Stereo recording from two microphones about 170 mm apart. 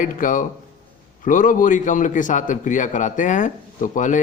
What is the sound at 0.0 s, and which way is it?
Speech, 50° left (ahead or behind).